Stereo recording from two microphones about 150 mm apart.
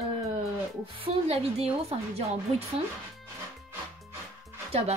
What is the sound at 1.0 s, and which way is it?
Speech, 45° right (ahead or behind).